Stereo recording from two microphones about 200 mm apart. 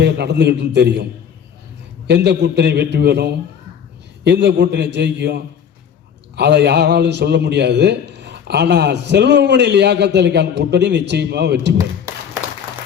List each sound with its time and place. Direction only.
0.0 s a man's voice: 60° right (ahead or behind)
2.0 s a man's voice: 55° right (ahead or behind)
11.8 s a sound: 15° right (ahead or behind)